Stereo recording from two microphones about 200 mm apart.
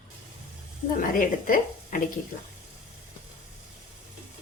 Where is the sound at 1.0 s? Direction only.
45° left (ahead or behind).